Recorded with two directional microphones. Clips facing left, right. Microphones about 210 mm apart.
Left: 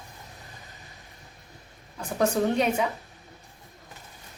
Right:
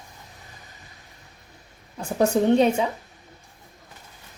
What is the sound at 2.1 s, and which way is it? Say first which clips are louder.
Speech: right 5 dB; 30° right (ahead or behind).